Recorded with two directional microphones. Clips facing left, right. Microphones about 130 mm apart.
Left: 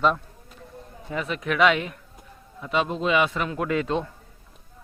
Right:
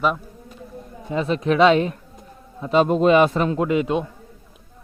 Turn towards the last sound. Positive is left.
turn(degrees=-15)  # may be behind; listen again after turning